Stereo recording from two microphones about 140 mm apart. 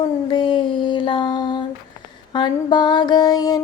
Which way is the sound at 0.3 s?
35° left (ahead or behind).